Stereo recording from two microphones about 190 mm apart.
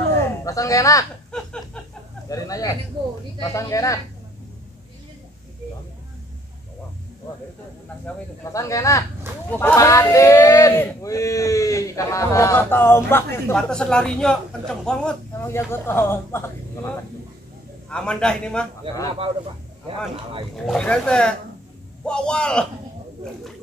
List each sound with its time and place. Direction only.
0.4 s speech: 15° left (ahead or behind)
1.3 s a sound: 5° left (ahead or behind)
2.2 s speech: 20° left (ahead or behind)
8.5 s speech: 15° left (ahead or behind)
17.8 s speech: 5° left (ahead or behind)
20.5 s speech: 5° left (ahead or behind)